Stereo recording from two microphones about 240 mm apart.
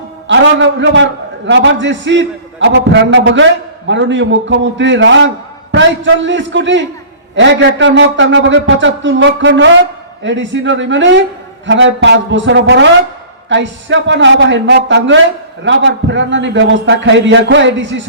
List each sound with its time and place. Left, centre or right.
0.3 s a man's voice: right